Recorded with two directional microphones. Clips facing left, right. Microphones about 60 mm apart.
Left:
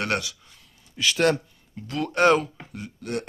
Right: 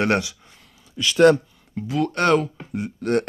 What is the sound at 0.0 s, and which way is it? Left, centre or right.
Speech, right.